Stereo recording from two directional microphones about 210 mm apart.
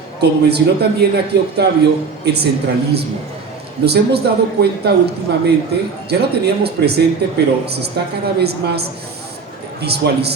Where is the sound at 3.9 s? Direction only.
50° right (ahead or behind).